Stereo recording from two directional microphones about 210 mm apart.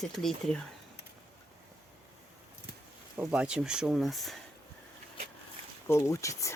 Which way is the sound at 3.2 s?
5° right (ahead or behind).